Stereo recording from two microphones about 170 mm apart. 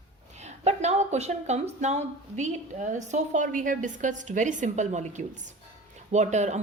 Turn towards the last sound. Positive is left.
turn(degrees=-45)  # may be behind; listen again after turning